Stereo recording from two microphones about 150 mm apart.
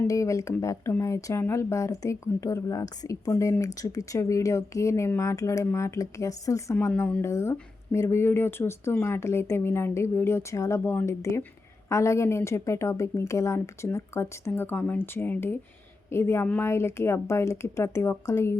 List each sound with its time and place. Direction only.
0.0 s speech: 20° left (ahead or behind)